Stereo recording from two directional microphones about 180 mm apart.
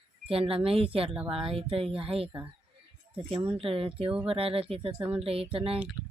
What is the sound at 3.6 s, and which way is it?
Speech, 30° right (ahead or behind).